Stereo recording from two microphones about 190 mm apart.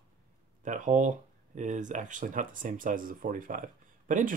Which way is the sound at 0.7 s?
40° right (ahead or behind).